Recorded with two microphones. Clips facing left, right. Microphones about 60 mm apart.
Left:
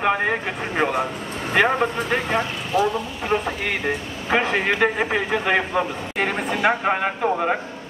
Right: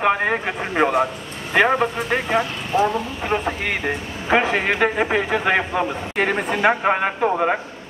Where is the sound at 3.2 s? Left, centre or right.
Centre.